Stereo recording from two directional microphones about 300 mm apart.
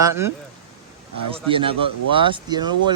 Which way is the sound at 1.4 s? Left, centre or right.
Centre.